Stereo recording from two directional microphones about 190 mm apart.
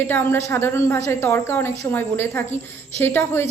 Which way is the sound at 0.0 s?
10° left (ahead or behind).